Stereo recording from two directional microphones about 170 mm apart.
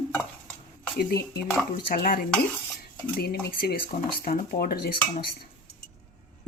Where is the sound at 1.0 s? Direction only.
65° left (ahead or behind).